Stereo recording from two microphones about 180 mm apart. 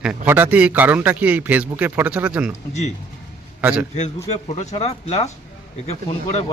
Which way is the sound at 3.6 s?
5° right (ahead or behind).